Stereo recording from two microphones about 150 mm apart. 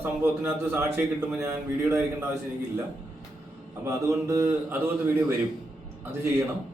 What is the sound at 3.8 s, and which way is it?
A man's voice, 20° right (ahead or behind).